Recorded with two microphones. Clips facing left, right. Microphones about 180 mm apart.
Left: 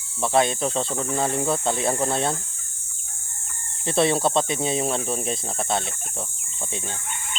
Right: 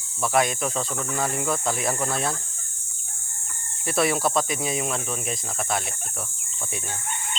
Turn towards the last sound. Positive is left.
turn(degrees=30)  # may be behind; listen again after turning